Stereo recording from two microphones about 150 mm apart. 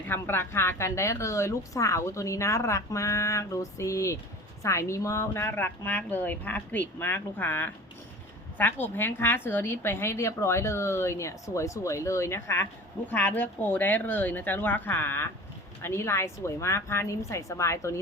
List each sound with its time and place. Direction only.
0.1 s a woman's voice: 15° left (ahead or behind)